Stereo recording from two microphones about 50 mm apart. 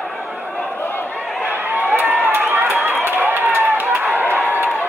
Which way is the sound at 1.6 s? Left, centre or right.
Right.